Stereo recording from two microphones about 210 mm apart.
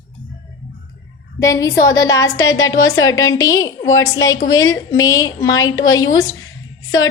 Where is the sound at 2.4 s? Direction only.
65° left (ahead or behind).